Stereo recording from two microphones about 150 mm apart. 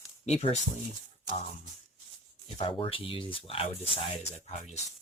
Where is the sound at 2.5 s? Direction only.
40° left (ahead or behind).